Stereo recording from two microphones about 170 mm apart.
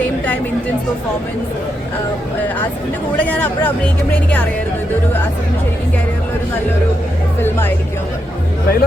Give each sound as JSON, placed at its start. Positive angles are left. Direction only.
{"t": 3.2, "sound": "speech", "side_deg": 10}